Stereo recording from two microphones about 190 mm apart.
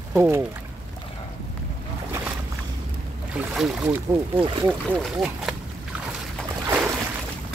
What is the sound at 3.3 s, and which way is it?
Speech, 5° right (ahead or behind).